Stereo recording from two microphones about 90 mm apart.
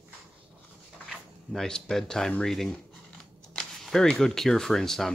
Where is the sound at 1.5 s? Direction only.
5° left (ahead or behind).